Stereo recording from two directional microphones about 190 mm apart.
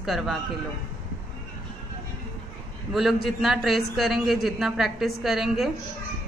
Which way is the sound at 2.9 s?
Centre (ahead or behind).